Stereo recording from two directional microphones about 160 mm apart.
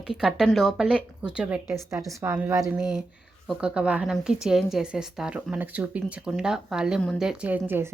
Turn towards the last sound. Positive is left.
turn(degrees=-10)  # may be behind; listen again after turning